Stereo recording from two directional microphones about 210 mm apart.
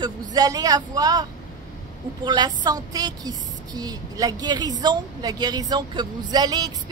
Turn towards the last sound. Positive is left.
turn(degrees=-20)  # may be behind; listen again after turning